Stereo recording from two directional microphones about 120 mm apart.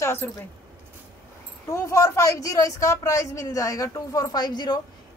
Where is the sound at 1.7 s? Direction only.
30° left (ahead or behind).